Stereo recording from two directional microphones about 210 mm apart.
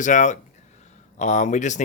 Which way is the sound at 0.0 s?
35° left (ahead or behind).